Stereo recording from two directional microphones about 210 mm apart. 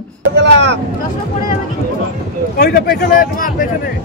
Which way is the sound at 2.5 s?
45° left (ahead or behind).